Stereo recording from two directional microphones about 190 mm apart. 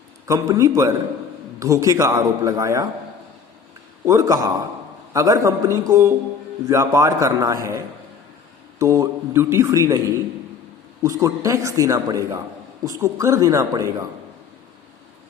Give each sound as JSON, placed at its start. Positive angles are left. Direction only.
{"t": 0.3, "sound": "a man's voice", "side_deg": -15}
{"t": 4.0, "sound": "a man's voice", "side_deg": -15}